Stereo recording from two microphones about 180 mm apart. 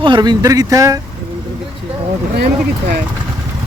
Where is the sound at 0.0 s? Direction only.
25° right (ahead or behind).